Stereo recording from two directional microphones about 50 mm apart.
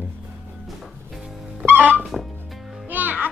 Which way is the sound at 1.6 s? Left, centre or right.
Right.